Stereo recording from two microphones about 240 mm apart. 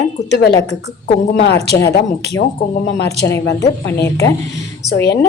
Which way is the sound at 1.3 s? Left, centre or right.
Left.